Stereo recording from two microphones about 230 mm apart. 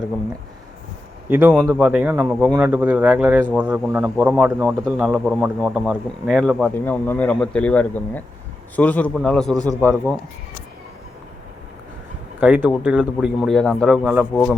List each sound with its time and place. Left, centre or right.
1.3 s speech: centre
9.6 s speech: centre
12.4 s speech: centre